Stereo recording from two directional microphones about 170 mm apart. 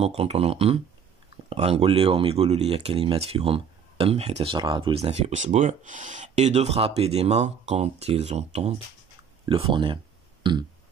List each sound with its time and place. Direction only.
0.0 s speech: 35° right (ahead or behind)
10.4 s burping: 25° right (ahead or behind)